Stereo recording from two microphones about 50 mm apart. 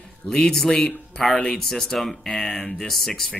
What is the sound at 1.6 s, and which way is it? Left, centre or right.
Speech, centre.